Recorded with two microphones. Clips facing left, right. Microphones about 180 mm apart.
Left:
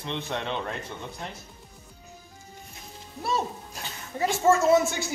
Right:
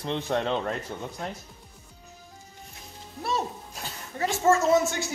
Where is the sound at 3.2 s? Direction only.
Centre (ahead or behind).